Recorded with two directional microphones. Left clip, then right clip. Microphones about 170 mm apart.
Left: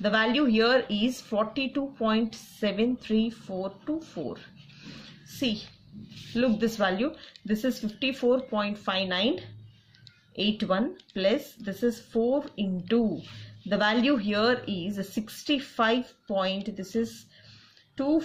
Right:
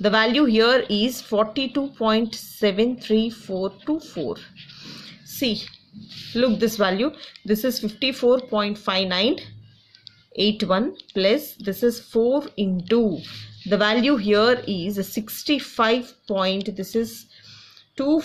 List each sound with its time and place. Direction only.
0.0 s speech: 30° right (ahead or behind)